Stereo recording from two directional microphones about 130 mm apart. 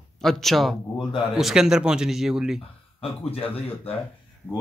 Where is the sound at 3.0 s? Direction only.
50° left (ahead or behind).